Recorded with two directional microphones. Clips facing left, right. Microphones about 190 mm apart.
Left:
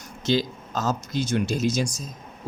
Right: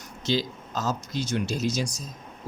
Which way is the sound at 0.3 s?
50° left (ahead or behind).